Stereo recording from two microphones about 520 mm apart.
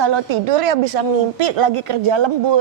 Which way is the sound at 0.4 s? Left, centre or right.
Right.